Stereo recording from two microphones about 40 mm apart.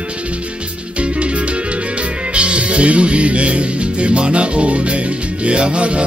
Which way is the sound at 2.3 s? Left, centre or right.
Right.